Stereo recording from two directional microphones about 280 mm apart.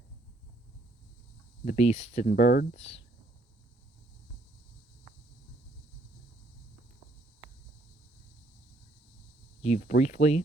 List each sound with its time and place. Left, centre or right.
1.6 s speech: left
9.6 s speech: left